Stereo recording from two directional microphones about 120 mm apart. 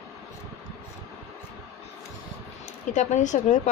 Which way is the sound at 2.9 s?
90° left.